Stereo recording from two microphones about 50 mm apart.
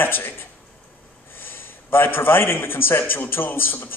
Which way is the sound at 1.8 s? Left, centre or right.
Left.